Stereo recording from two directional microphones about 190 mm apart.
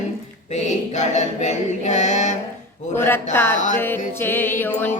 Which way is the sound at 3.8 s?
10° left (ahead or behind).